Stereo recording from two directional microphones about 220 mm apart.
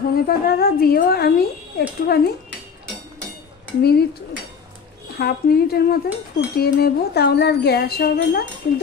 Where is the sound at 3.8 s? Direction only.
45° left (ahead or behind).